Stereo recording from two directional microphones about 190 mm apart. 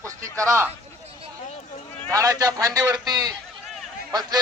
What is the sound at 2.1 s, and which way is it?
Speech, 15° right (ahead or behind).